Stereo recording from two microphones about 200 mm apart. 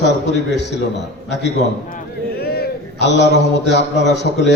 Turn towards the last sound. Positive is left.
turn(degrees=60)  # may be behind; listen again after turning